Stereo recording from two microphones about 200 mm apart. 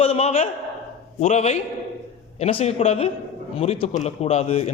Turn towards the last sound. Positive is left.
turn(degrees=30)  # may be behind; listen again after turning